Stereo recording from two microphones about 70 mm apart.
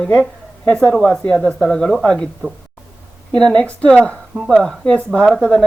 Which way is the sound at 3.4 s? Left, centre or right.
Centre.